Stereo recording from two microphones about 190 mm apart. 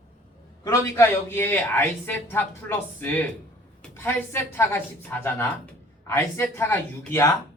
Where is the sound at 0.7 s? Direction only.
15° left (ahead or behind).